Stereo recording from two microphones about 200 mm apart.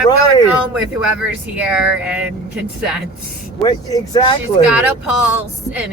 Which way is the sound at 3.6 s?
20° left (ahead or behind).